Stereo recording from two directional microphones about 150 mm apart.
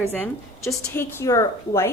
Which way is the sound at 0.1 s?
10° left (ahead or behind).